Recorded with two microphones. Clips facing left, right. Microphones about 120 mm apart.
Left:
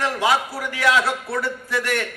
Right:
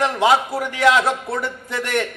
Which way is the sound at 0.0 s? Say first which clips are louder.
Right 4 dB; 20° right (ahead or behind).